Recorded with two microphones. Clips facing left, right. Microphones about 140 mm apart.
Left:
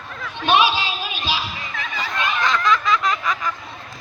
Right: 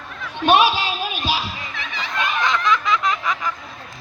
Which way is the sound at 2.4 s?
20° right (ahead or behind).